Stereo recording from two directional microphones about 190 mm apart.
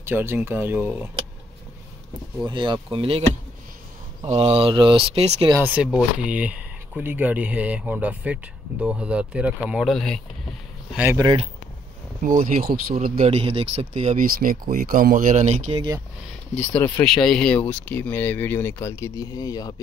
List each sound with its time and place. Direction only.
0.0 s speech: 10° right (ahead or behind)
2.4 s speech: 25° right (ahead or behind)
4.3 s speech: 30° right (ahead or behind)
5.5 s speech: 10° right (ahead or behind)
12.2 s speech: 45° right (ahead or behind)
13.2 s speech: 30° right (ahead or behind)
16.5 s speech: 10° left (ahead or behind)